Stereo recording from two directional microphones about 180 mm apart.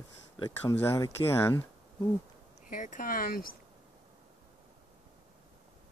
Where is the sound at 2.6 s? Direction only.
45° left (ahead or behind).